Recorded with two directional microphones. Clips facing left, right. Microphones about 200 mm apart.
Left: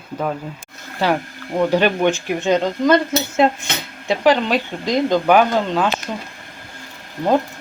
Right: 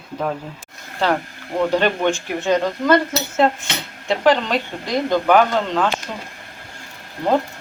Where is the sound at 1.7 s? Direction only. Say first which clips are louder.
Left 2 dB; 10° left (ahead or behind).